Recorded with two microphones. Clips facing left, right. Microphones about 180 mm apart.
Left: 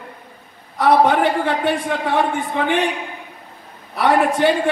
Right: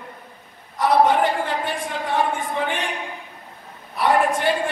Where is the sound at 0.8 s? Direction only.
65° left (ahead or behind).